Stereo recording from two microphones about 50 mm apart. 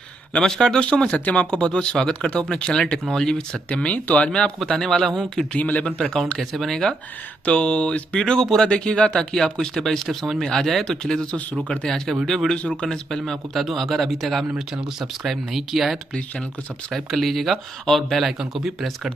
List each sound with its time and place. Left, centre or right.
0.4 s speech: centre
4.6 s speech: centre
5.5 s speech: left
5.9 s speech: centre
7.4 s speech: left; by 18.3 s centre
18.4 s speech: centre